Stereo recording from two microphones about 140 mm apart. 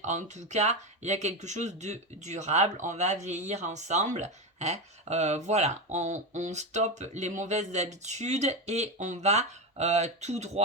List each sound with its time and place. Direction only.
0.0 s speech: 55° right (ahead or behind)